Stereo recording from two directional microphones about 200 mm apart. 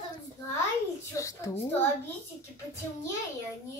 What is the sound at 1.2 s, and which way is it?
Speech, 15° left (ahead or behind).